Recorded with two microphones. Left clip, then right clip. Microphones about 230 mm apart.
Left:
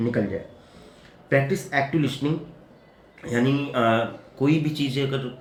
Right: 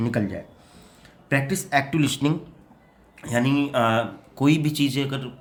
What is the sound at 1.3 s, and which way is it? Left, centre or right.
Speech, right.